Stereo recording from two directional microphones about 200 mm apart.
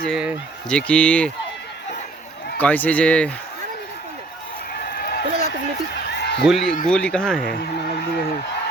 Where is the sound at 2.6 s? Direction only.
10° left (ahead or behind).